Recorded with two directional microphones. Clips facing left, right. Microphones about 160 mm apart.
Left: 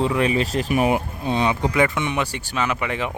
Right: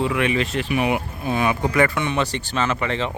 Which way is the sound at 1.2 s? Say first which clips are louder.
Right 2 dB; 25° left (ahead or behind).